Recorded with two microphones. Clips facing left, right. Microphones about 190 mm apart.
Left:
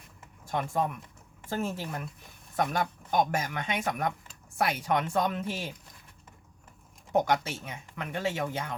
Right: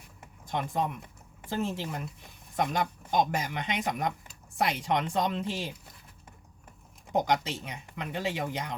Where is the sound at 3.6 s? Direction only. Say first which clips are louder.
Right 1 dB; 20° right (ahead or behind).